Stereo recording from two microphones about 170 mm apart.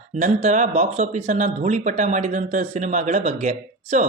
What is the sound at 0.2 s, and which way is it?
A man's voice, 45° right (ahead or behind).